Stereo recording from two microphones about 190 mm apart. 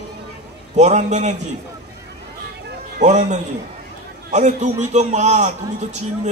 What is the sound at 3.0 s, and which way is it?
A man's voice, 40° right (ahead or behind).